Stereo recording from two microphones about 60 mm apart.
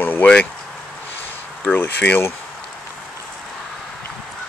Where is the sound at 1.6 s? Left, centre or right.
Left.